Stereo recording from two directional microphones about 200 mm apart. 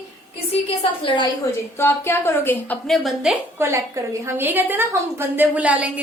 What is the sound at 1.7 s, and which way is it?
A woman's voice, 10° left (ahead or behind).